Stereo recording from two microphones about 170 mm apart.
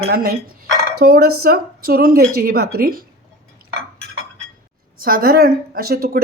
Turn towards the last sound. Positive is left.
turn(degrees=-60)  # may be behind; listen again after turning